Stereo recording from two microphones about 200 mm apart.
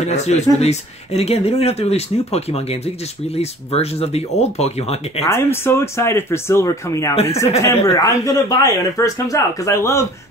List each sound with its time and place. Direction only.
0.1 s speech: 35° left (ahead or behind)
5.2 s speech: 15° left (ahead or behind)